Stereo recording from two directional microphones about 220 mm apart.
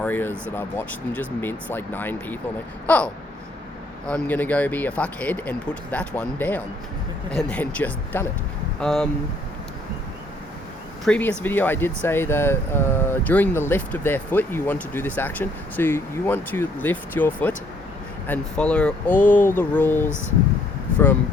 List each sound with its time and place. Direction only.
0.0 s speech: 10° left (ahead or behind)
11.0 s speech: 5° left (ahead or behind)